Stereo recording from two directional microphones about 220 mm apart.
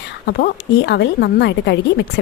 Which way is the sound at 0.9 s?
50° left (ahead or behind).